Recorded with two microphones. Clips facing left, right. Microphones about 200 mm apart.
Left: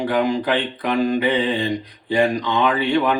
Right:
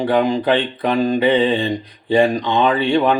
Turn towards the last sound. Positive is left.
turn(degrees=-30)  # may be behind; listen again after turning